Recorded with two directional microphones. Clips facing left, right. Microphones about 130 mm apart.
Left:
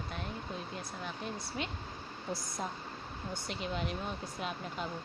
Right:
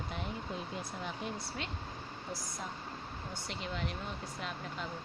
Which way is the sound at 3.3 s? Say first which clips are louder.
Left 4 dB; 20° left (ahead or behind).